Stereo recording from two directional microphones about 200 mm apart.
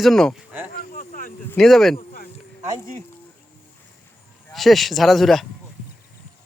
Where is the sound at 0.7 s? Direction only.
45° left (ahead or behind).